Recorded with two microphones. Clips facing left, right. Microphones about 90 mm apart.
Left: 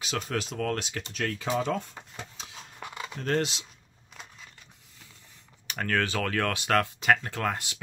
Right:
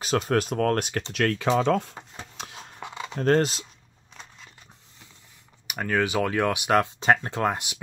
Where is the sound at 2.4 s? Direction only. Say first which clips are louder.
Right 6 dB; 60° right (ahead or behind).